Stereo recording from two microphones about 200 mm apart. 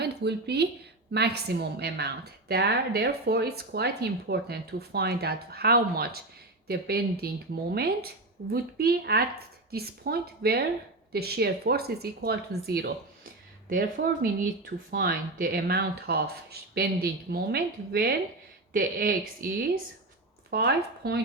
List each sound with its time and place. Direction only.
0.0 s speech: 55° right (ahead or behind)
20.5 s speech: 55° right (ahead or behind)